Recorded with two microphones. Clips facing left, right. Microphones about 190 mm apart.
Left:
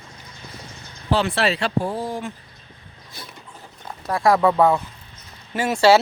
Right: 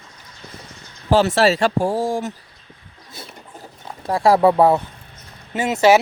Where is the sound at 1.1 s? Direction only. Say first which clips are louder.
Right 5 dB; 45° right (ahead or behind).